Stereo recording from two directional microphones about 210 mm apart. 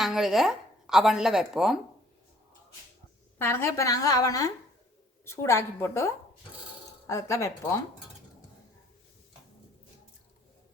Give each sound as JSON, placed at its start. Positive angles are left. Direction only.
{"t": 0.0, "sound": "speech", "side_deg": 0}
{"t": 3.3, "sound": "a woman's voice", "side_deg": 10}
{"t": 7.1, "sound": "a woman's voice", "side_deg": 15}